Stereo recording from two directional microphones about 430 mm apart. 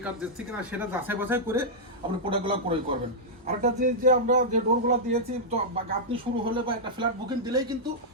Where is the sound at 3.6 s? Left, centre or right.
Centre.